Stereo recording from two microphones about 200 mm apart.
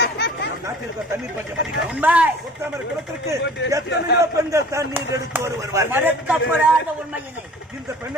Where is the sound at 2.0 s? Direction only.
5° right (ahead or behind).